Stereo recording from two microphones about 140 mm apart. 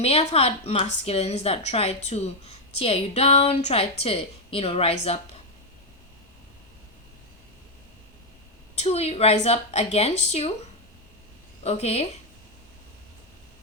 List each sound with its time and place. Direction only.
0.0 s a woman's voice: 45° left (ahead or behind)
8.8 s a woman's voice: 50° left (ahead or behind)
11.6 s a woman's voice: 45° left (ahead or behind)